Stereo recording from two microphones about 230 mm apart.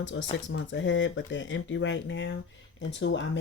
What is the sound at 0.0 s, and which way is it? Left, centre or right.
Speech, left.